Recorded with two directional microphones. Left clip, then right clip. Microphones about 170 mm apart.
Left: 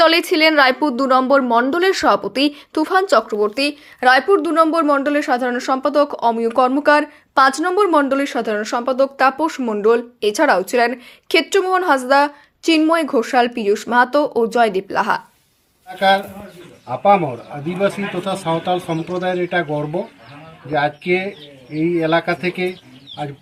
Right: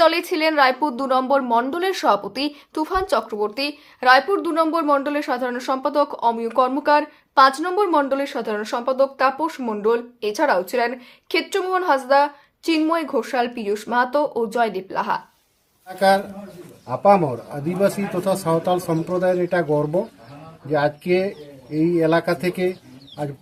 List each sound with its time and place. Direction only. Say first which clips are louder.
0.0 s a woman's voice: left 4 dB; 25° left (ahead or behind)
16.9 s speech: left 2 dB; 35° right (ahead or behind)
19.7 s speech: right 2 dB; 20° right (ahead or behind)
21.8 s speech: left 1 dB; 35° right (ahead or behind)